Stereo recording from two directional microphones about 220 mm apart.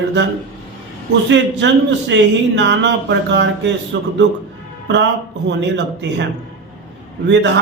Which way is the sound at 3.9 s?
55° right (ahead or behind).